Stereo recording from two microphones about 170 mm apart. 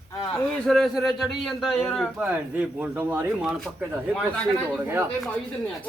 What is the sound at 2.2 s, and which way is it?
Speech, 10° right (ahead or behind).